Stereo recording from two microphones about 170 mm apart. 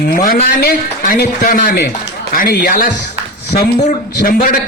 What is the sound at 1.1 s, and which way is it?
A man's voice, 60° left (ahead or behind).